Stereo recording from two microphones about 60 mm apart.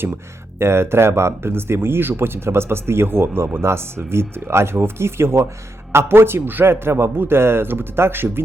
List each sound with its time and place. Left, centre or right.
0.6 s speech: right